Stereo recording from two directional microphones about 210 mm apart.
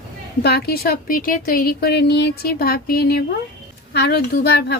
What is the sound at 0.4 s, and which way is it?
A woman's voice, 50° left (ahead or behind).